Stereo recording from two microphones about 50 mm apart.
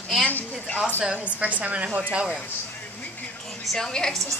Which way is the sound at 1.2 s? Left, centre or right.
Right.